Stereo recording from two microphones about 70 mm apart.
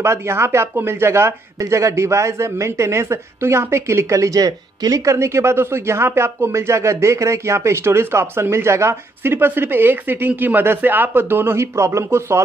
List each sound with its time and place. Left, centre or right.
0.0 s a man's voice: right
1.6 s a man's voice: right